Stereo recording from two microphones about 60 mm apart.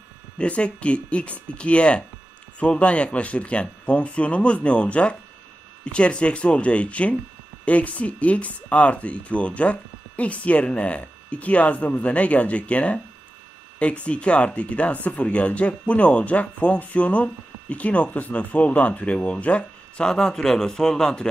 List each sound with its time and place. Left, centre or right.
0.3 s speech: centre